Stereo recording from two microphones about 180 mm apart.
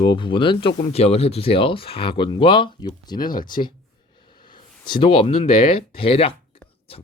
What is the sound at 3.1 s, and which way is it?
Speech, 50° left (ahead or behind).